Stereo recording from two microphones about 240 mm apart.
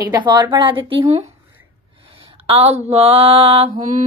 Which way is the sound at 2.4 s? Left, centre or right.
Right.